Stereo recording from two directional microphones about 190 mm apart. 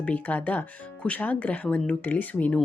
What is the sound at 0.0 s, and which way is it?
Speech, 10° left (ahead or behind).